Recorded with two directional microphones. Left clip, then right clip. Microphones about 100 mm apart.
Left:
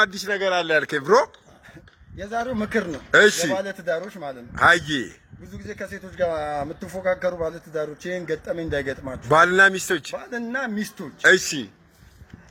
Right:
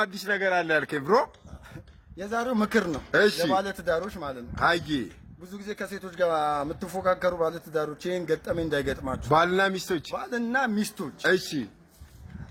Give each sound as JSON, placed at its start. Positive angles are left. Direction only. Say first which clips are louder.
{"t": 0.0, "sound": "a man's voice", "louder": "left 5 dB", "side_deg": 10}
{"t": 2.3, "sound": "a man's voice", "louder": "left 1 dB", "side_deg": -30}
{"t": 3.1, "sound": "a man's voice", "louder": "left 8 dB", "side_deg": 35}
{"t": 3.5, "sound": "a man's voice", "louder": "left 1 dB", "side_deg": -25}
{"t": 4.5, "sound": "a man's voice", "louder": "left 8 dB", "side_deg": 25}
{"t": 5.5, "sound": "a man's voice", "louder": "left 1 dB", "side_deg": -20}
{"t": 9.3, "sound": "a man's voice", "louder": "left 7 dB", "side_deg": 20}
{"t": 10.2, "sound": "a man's voice", "louder": "right 1 dB", "side_deg": -20}
{"t": 11.2, "sound": "a man's voice", "louder": "left 8 dB", "side_deg": 30}